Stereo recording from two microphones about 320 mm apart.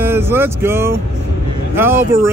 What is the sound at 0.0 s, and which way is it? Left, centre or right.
Speech, centre.